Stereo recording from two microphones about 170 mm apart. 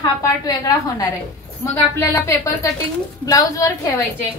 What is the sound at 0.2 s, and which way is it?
A woman's voice, 20° left (ahead or behind).